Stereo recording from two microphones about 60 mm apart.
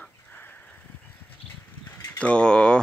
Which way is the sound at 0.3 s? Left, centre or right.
Left.